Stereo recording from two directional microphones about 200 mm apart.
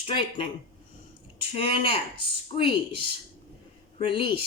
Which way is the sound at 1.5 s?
25° left (ahead or behind).